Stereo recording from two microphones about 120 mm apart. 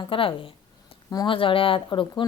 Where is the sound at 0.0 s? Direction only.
45° left (ahead or behind).